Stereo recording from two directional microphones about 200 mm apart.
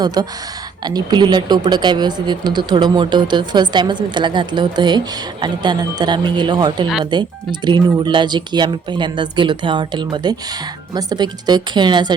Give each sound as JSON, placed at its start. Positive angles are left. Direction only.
{"t": 0.0, "sound": "speech", "side_deg": -20}